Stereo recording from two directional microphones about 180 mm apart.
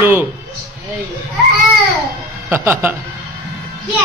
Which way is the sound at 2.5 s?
10° right (ahead or behind).